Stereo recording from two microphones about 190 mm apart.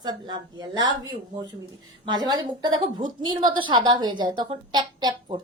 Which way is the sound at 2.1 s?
20° right (ahead or behind).